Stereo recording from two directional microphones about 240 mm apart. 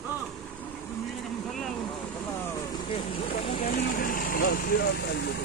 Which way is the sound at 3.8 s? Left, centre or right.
Left.